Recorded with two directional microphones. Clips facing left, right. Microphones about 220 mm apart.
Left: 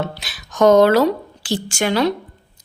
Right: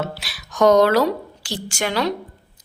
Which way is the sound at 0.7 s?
25° left (ahead or behind).